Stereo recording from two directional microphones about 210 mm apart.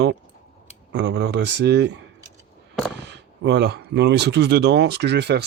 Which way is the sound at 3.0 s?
55° right (ahead or behind).